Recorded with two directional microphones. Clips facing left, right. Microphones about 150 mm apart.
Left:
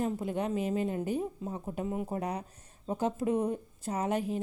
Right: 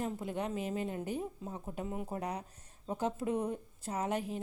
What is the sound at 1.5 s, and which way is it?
Speech, 30° left (ahead or behind).